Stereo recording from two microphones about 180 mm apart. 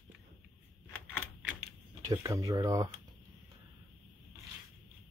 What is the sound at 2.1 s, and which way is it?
Speech, 20° right (ahead or behind).